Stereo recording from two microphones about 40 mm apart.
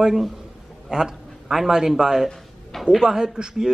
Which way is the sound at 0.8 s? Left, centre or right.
Centre.